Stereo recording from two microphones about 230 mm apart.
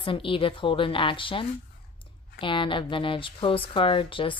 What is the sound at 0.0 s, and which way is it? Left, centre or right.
Speech, left.